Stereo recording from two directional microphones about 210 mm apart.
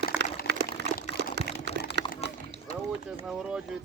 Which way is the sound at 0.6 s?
45° left (ahead or behind).